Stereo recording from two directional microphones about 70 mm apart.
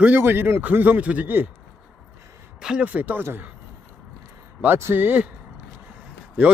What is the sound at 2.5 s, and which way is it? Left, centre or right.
Speech, centre.